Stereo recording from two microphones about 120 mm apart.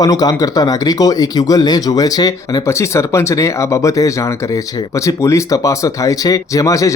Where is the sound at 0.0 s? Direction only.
30° left (ahead or behind).